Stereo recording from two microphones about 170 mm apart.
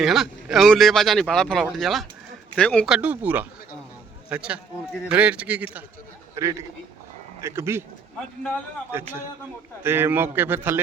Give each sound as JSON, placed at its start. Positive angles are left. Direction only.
{"t": 0.0, "sound": "a man's voice", "side_deg": 0}
{"t": 8.9, "sound": "a man's voice", "side_deg": -15}